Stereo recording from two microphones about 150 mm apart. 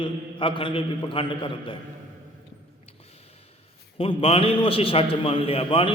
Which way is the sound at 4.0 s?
40° left (ahead or behind).